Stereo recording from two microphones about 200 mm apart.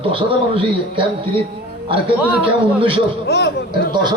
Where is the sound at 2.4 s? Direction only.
25° right (ahead or behind).